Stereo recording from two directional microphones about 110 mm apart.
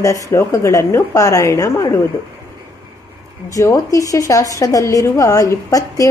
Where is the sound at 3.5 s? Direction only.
30° left (ahead or behind).